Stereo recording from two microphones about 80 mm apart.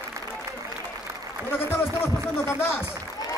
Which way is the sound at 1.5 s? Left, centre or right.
Left.